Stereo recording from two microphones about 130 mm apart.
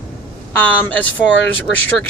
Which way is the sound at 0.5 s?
15° left (ahead or behind).